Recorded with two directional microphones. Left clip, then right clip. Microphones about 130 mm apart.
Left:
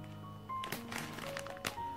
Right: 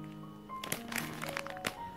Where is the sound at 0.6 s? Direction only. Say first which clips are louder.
Right 7 dB; 70° right (ahead or behind).